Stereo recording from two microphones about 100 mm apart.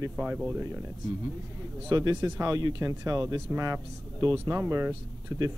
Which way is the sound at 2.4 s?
35° right (ahead or behind).